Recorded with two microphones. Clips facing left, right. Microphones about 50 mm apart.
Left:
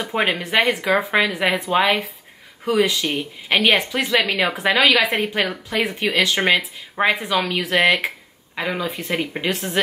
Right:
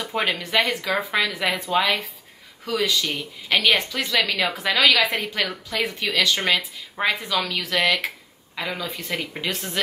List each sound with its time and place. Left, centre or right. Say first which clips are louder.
0.0 s speech: left 3 dB; left